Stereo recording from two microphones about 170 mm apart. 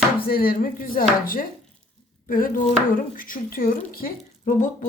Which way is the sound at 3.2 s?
55° left (ahead or behind).